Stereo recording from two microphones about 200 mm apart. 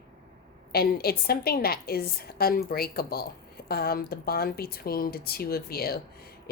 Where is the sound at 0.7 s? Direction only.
50° left (ahead or behind).